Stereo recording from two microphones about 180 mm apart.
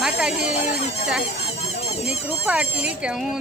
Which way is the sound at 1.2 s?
35° left (ahead or behind).